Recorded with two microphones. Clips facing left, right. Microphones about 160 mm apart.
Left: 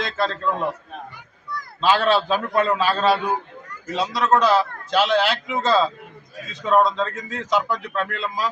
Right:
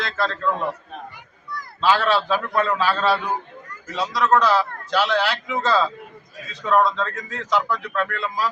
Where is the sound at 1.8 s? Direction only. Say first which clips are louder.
Left 1 dB; 25° left (ahead or behind).